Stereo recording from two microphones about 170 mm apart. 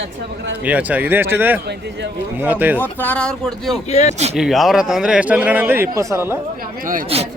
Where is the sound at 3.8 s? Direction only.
40° left (ahead or behind).